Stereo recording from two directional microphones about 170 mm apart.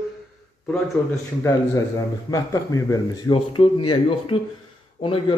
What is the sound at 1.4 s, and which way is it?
A man's voice, 20° left (ahead or behind).